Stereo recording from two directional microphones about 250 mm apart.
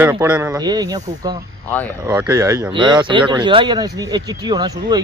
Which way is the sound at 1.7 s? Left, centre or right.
Centre.